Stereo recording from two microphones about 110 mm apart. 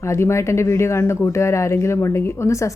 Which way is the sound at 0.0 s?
25° left (ahead or behind).